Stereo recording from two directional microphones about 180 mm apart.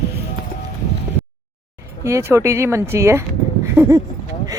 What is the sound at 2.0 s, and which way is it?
A woman's voice, 15° right (ahead or behind).